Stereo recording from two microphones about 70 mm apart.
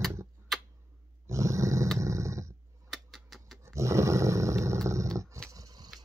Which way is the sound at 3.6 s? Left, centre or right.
Right.